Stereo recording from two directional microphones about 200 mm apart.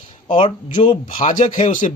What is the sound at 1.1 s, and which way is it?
Speech, 40° left (ahead or behind).